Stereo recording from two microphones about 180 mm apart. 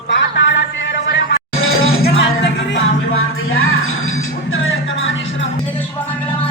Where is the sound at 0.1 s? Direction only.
80° left.